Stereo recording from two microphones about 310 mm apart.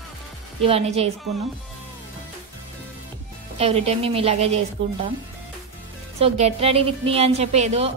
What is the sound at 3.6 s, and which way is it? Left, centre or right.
A woman's voice, centre.